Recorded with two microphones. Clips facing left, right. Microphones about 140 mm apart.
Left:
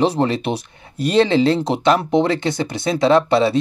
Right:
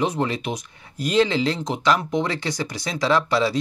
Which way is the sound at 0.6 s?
30° left (ahead or behind).